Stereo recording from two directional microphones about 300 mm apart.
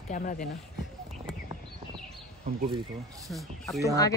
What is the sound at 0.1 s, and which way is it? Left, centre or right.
Speech, left.